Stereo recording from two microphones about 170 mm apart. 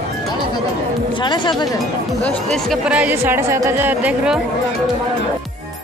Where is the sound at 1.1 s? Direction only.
25° left (ahead or behind).